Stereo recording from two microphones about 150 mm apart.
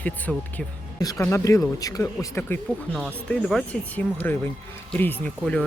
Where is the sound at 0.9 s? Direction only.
20° left (ahead or behind).